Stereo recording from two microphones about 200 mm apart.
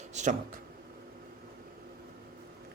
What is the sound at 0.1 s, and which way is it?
Speech, 35° right (ahead or behind).